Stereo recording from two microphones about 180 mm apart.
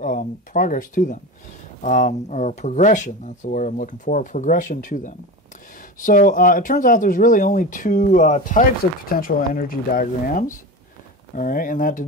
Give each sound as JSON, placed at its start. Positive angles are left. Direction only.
{"t": 0.0, "sound": "speech", "side_deg": 50}